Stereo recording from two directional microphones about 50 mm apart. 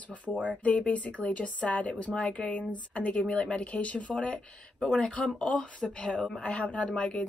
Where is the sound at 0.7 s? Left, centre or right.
Left.